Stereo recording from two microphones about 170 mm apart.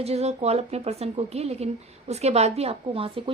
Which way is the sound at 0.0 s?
40° right (ahead or behind).